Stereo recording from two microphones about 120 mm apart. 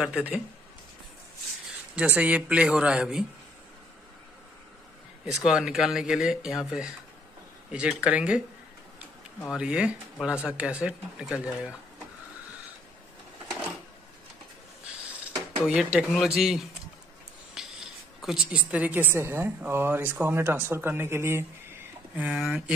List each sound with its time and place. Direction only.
0.0 s speech: 10° right (ahead or behind)
2.0 s speech: 10° right (ahead or behind)
5.2 s speech: 5° right (ahead or behind)
9.4 s speech: 5° right (ahead or behind)
15.7 s speech: 10° right (ahead or behind)
17.6 s a sound: 5° right (ahead or behind)
19.1 s speech: 20° right (ahead or behind)
22.3 s speech: 5° right (ahead or behind)